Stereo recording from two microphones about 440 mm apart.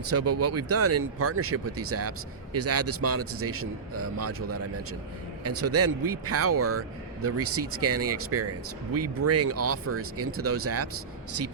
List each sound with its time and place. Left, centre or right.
0.1 s speech: right